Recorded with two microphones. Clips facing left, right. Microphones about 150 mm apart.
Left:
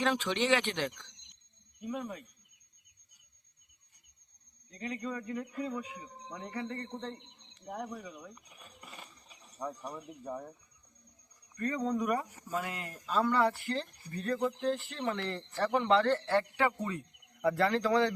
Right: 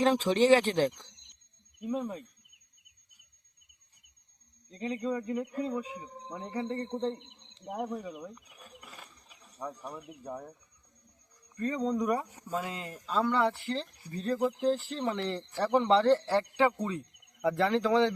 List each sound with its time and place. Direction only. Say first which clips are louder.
0.0 s speech: right 6 dB; 35° right (ahead or behind)
4.7 s speech: right 5 dB; 25° right (ahead or behind)
5.5 s speech: right 3 dB; 35° right (ahead or behind)
5.7 s speech: right 4 dB; 25° right (ahead or behind)
8.4 s a sound: right 1 dB; centre (ahead or behind)
11.5 s speech: right 2 dB; 20° right (ahead or behind)
13.2 s speech: right 1 dB; centre (ahead or behind)
13.5 s speech: right 1 dB; 25° right (ahead or behind)
14.3 s speech: right 4 dB; 5° right (ahead or behind)
14.7 s speech: right 4 dB; 30° right (ahead or behind)
15.0 s speech: right 2 dB; 10° right (ahead or behind)
15.7 s speech: right 4 dB; 25° right (ahead or behind)
16.7 s insect: right 3 dB; 20° right (ahead or behind)
17.6 s speech: right 3 dB; 20° right (ahead or behind)